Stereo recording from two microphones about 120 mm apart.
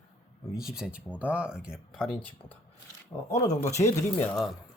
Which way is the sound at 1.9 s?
5° left (ahead or behind).